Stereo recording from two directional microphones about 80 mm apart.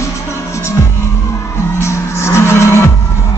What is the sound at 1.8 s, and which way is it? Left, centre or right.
Music, left.